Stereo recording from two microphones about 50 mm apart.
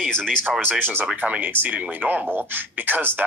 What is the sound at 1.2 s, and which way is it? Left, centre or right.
Speech, right.